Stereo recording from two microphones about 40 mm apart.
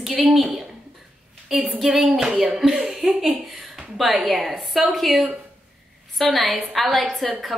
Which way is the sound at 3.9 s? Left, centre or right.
Centre.